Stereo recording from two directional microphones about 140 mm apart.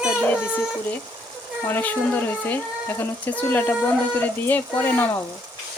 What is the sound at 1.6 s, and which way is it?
Speech, 15° left (ahead or behind).